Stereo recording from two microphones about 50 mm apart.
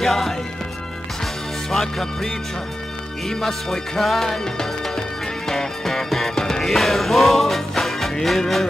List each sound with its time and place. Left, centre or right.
0.0 s music: centre
1.7 s music: centre
3.3 s speech: centre
4.0 s music: centre